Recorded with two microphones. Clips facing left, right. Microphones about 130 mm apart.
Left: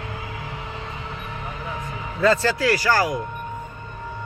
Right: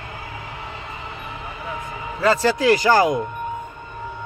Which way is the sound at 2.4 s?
20° right (ahead or behind).